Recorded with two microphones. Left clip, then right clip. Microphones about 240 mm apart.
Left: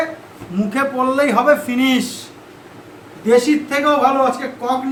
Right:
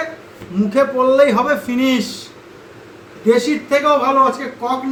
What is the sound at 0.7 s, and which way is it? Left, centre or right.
Speech, left.